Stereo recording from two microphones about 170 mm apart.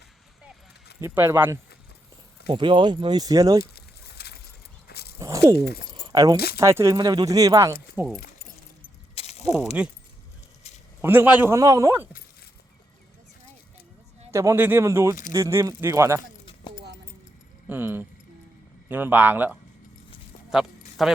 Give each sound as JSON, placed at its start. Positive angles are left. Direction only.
{"t": 1.0, "sound": "a man's voice", "side_deg": -15}
{"t": 2.5, "sound": "speech", "side_deg": -30}
{"t": 3.6, "sound": "a sound", "side_deg": 70}
{"t": 4.9, "sound": "walk", "side_deg": 70}
{"t": 5.2, "sound": "a sound", "side_deg": -20}
{"t": 6.1, "sound": "speech", "side_deg": -20}
{"t": 9.1, "sound": "mechanisms", "side_deg": 40}
{"t": 9.5, "sound": "a man's voice", "side_deg": -5}
{"t": 11.0, "sound": "a man's voice", "side_deg": -10}
{"t": 14.3, "sound": "a man's voice", "side_deg": -15}
{"t": 17.7, "sound": "a man's voice", "side_deg": -10}
{"t": 20.5, "sound": "music", "side_deg": 0}